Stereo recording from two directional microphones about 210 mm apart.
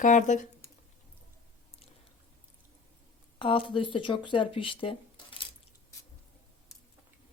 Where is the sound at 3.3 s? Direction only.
25° left (ahead or behind).